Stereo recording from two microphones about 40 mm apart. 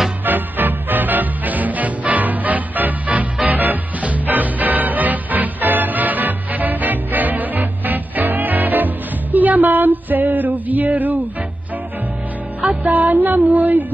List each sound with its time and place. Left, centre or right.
0.2 s music: right
12.8 s music: right